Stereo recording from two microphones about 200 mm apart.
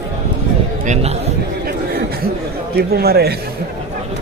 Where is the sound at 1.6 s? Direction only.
50° right (ahead or behind).